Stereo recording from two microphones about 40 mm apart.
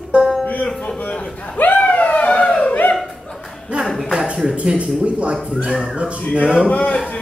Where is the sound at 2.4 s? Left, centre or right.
Left.